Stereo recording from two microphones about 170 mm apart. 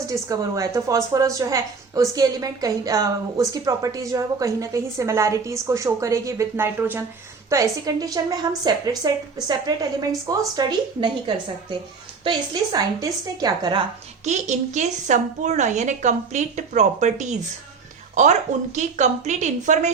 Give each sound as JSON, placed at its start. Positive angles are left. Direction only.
{"t": 0.1, "sound": "a woman's voice", "side_deg": -20}
{"t": 12.2, "sound": "a woman's voice", "side_deg": -25}
{"t": 14.3, "sound": "a woman's voice", "side_deg": -45}